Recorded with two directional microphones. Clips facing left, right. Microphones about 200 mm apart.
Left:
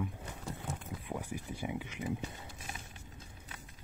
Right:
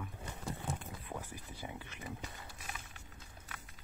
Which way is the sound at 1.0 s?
15° left (ahead or behind).